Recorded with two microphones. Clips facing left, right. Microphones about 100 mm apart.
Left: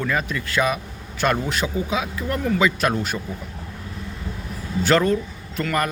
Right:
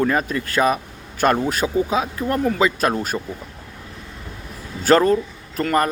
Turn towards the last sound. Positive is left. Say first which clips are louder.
# right 4 dB
turn(degrees=-35)  # may be behind; listen again after turning